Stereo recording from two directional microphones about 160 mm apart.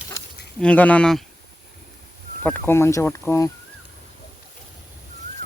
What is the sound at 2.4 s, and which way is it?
Speech, 15° left (ahead or behind).